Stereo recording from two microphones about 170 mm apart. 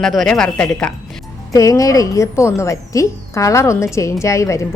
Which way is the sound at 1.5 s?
20° left (ahead or behind).